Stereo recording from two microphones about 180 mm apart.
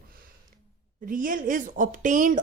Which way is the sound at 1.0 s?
50° right (ahead or behind).